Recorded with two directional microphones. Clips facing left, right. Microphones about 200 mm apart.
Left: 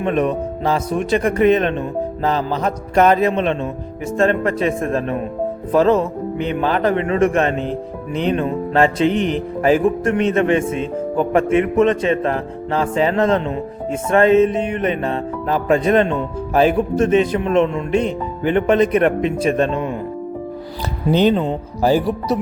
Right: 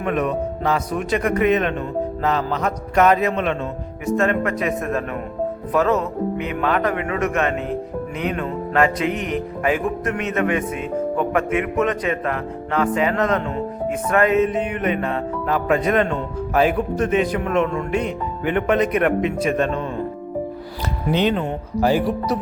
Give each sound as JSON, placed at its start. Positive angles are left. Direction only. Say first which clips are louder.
{"t": 0.0, "sound": "speech", "louder": "left 3 dB", "side_deg": 30}
{"t": 2.2, "sound": "mantra", "louder": "left 3 dB", "side_deg": 30}
{"t": 5.7, "sound": "speech", "louder": "left 5 dB", "side_deg": 30}
{"t": 21.1, "sound": "mantra", "louder": "left 5 dB", "side_deg": 35}
{"t": 21.3, "sound": "speech", "louder": "left 2 dB", "side_deg": 30}